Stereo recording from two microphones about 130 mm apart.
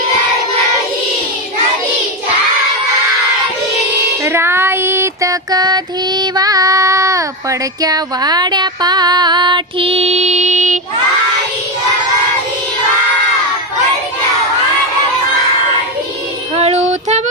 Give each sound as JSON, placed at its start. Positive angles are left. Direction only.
{"t": 4.2, "sound": "child singing", "side_deg": -20}
{"t": 7.8, "sound": "a sound", "side_deg": -30}
{"t": 16.6, "sound": "child singing", "side_deg": -55}